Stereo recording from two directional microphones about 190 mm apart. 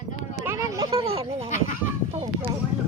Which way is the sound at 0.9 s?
30° right (ahead or behind).